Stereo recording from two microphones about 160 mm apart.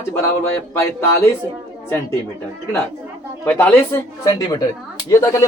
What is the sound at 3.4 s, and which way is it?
Speech, 10° left (ahead or behind).